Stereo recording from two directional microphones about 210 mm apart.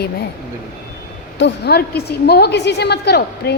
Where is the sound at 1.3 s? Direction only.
55° left (ahead or behind).